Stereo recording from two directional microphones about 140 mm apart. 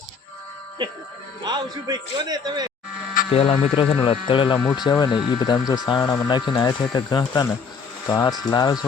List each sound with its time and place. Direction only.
1.5 s a man's voice: 30° right (ahead or behind)
3.3 s speech: 40° left (ahead or behind)
8.0 s speech: 15° left (ahead or behind)
8.4 s speech: 30° left (ahead or behind)